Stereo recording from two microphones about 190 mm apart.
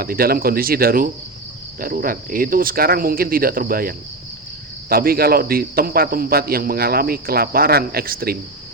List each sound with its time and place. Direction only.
0.0 s speech: 50° right (ahead or behind)